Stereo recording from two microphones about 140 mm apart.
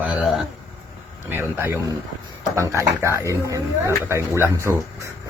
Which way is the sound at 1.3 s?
15° right (ahead or behind).